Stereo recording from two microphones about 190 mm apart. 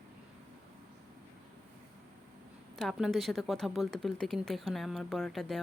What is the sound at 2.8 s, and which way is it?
Speech, centre (ahead or behind).